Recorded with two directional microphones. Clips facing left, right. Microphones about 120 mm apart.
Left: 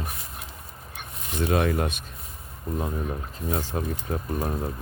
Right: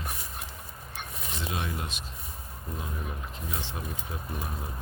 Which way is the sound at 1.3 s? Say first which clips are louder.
Left 11 dB; 55° left (ahead or behind).